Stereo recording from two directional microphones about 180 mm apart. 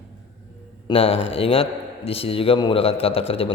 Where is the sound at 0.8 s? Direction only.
30° left (ahead or behind).